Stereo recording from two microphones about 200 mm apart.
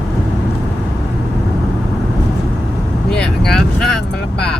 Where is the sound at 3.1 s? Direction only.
5° left (ahead or behind).